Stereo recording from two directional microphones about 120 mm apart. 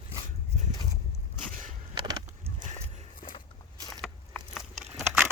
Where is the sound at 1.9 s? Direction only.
35° right (ahead or behind).